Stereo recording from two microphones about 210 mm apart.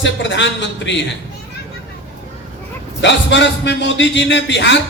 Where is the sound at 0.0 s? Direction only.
60° left (ahead or behind).